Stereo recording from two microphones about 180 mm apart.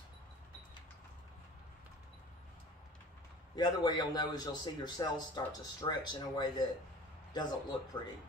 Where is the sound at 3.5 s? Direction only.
25° left (ahead or behind).